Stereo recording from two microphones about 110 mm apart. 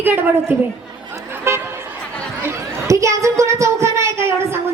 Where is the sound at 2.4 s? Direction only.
25° right (ahead or behind).